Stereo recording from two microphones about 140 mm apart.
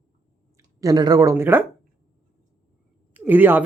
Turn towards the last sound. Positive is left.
turn(degrees=-15)  # may be behind; listen again after turning